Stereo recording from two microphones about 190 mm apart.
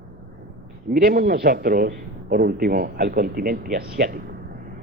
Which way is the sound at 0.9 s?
50° right (ahead or behind).